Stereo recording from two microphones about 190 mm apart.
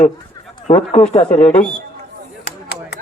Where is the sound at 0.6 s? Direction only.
35° left (ahead or behind).